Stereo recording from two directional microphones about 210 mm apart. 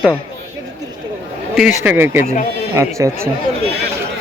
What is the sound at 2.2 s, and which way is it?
Speech, 35° left (ahead or behind).